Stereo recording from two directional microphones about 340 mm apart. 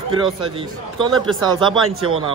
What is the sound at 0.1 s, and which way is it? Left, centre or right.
Speech, centre.